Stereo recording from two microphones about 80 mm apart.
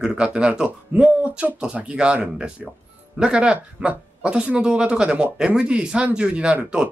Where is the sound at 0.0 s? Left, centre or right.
Centre.